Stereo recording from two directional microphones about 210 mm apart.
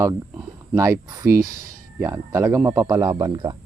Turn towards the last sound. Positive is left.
turn(degrees=-20)  # may be behind; listen again after turning